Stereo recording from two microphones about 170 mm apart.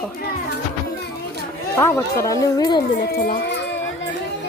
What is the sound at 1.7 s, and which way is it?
Speech, 15° left (ahead or behind).